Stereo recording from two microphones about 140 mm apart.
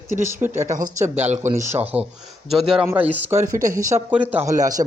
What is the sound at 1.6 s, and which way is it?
A man's voice, 15° right (ahead or behind).